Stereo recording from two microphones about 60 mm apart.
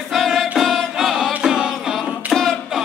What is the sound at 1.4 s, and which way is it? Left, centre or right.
Music, centre.